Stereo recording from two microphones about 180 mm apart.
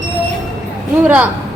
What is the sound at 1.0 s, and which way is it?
Speech, 10° right (ahead or behind).